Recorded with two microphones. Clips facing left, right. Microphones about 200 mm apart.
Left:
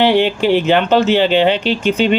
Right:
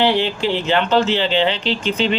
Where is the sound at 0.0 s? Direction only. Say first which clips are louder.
Left 5 dB; 60° left (ahead or behind).